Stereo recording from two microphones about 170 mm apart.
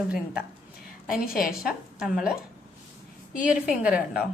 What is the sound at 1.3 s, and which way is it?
Speech, centre (ahead or behind).